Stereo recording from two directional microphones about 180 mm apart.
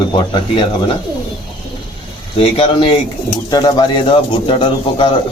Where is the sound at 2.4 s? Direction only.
30° left (ahead or behind).